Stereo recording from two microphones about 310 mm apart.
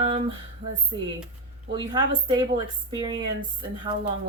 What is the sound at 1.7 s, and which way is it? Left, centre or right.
Speech, centre.